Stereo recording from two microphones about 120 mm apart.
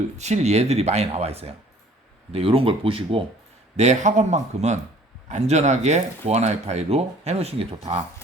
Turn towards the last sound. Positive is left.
turn(degrees=-55)  # may be behind; listen again after turning